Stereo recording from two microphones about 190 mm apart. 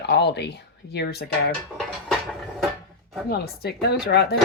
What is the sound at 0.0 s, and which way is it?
Speech, 60° left (ahead or behind).